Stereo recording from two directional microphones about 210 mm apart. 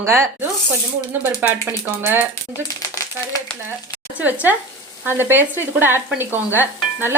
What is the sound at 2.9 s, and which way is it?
Speech, 15° left (ahead or behind).